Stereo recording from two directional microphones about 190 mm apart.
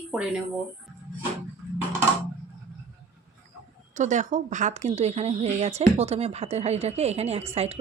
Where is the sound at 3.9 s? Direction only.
40° right (ahead or behind).